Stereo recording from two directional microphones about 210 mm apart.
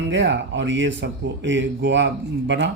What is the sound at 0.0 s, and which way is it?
Speech, 55° right (ahead or behind).